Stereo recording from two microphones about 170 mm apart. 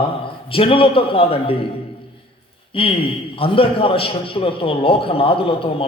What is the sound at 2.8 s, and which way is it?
Speech, 30° left (ahead or behind).